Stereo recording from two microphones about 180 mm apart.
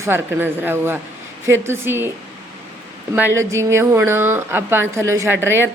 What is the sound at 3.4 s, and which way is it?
A woman's voice, 15° right (ahead or behind).